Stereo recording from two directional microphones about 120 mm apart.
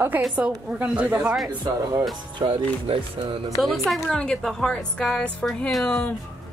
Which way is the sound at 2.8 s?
45° right (ahead or behind).